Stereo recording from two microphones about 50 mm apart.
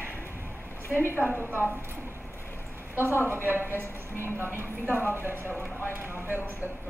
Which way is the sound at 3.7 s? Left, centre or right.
Left.